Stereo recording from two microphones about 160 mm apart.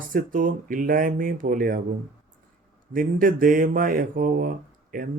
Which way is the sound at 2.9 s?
60° right (ahead or behind).